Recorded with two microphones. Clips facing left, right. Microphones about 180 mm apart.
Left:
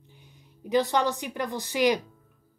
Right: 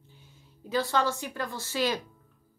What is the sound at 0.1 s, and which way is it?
Speech, 15° left (ahead or behind).